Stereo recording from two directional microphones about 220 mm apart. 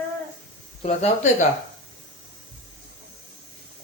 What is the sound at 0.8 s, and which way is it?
Speech, 30° left (ahead or behind).